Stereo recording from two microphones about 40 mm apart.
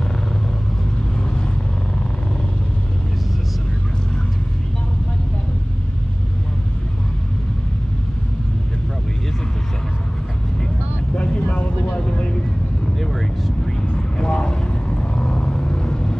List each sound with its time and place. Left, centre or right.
11.3 s vehicle: left
13.9 s vehicle: left